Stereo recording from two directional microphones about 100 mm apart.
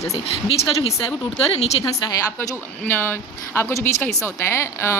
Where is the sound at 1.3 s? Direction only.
70° left (ahead or behind).